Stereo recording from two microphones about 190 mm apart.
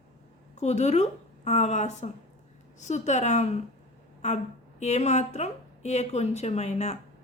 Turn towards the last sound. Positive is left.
turn(degrees=35)  # may be behind; listen again after turning